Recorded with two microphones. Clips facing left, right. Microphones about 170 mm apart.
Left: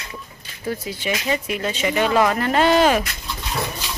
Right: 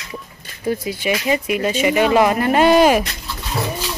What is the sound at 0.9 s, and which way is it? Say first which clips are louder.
Speech: right 3 dB; 10° right (ahead or behind).